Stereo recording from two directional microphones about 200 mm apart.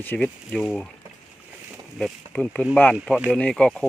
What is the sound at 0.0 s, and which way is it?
Speech, 5° left (ahead or behind).